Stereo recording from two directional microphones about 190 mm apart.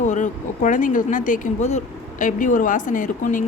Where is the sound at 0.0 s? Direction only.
40° left (ahead or behind).